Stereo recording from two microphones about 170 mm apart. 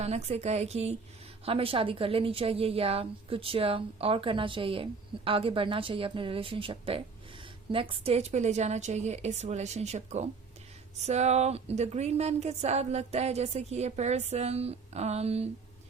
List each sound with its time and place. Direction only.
0.0 s a woman's voice: 40° right (ahead or behind)